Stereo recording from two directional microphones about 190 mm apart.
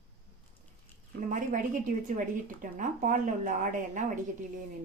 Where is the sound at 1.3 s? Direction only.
45° right (ahead or behind).